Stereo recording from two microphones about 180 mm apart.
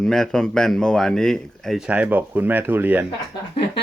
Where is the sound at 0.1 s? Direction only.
Centre (ahead or behind).